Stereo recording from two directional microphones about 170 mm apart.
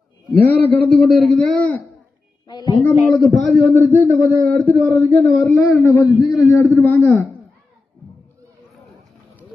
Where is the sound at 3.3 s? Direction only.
Centre (ahead or behind).